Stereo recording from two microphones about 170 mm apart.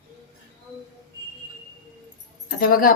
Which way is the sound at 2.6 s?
55° left (ahead or behind).